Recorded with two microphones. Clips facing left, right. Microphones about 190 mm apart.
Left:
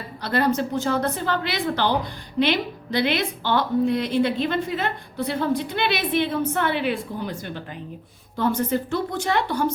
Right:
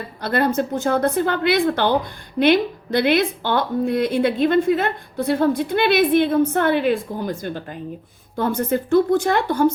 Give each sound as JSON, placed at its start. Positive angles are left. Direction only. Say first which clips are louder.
{"t": 0.2, "sound": "a woman's voice", "louder": "right 2 dB", "side_deg": -50}